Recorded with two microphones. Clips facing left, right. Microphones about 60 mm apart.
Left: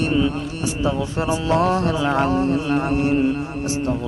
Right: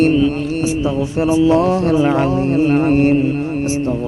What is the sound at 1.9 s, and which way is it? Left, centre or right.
Mantra, right.